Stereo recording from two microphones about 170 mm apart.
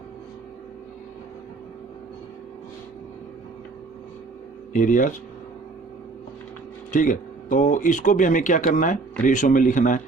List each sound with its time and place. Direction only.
4.7 s speech: 50° left (ahead or behind)
6.9 s speech: 50° left (ahead or behind)